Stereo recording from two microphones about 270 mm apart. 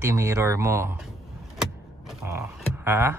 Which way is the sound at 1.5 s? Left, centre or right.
Centre.